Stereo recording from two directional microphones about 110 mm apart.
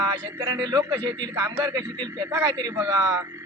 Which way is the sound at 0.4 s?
30° right (ahead or behind).